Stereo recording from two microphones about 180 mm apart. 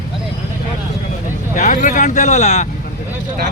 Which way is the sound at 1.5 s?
45° left (ahead or behind).